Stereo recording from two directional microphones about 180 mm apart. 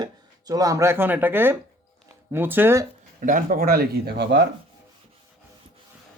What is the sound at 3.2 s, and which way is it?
Speech, 50° right (ahead or behind).